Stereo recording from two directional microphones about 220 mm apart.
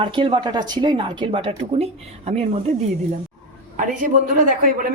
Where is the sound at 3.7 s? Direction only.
35° right (ahead or behind).